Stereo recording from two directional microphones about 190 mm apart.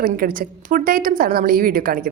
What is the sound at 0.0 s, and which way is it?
Speech, 50° right (ahead or behind).